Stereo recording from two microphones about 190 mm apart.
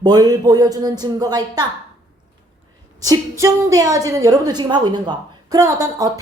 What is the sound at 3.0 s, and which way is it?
Speech, 15° right (ahead or behind).